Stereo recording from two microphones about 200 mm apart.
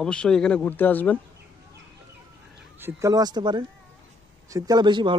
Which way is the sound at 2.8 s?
10° right (ahead or behind).